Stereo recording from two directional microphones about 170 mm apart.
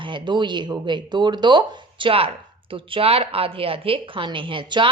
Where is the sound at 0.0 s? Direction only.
30° right (ahead or behind).